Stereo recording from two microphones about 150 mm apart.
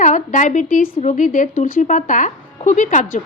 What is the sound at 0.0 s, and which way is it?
A woman's voice, 55° left (ahead or behind).